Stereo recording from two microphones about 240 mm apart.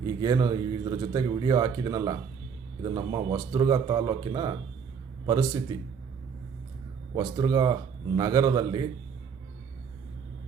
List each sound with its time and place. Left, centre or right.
0.2 s speech: centre
7.2 s speech: centre